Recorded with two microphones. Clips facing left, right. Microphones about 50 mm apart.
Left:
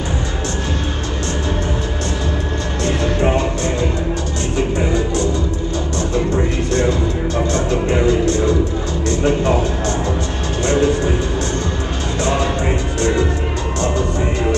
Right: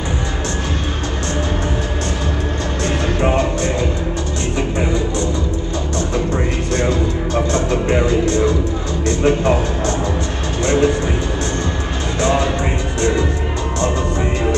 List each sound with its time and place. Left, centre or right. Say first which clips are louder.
2.8 s music: left 1 dB; right
6.3 s music: left 1 dB; right
10.6 s a sound: right 1 dB; right
12.2 s music: right 2 dB; right